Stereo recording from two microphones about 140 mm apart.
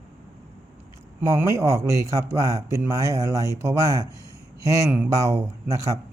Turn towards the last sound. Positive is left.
turn(degrees=-20)  # may be behind; listen again after turning